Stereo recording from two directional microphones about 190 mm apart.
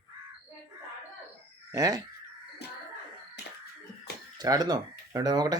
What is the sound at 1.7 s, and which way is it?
Speech, 20° right (ahead or behind).